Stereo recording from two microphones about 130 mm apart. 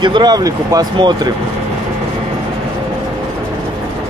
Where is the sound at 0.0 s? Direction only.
35° right (ahead or behind).